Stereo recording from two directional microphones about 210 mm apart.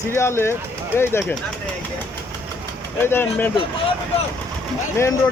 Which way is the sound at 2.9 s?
10° left (ahead or behind).